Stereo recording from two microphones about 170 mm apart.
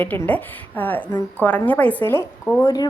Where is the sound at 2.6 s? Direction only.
25° left (ahead or behind).